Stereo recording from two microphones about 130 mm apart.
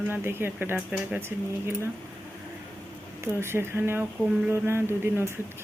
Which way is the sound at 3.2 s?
20° right (ahead or behind).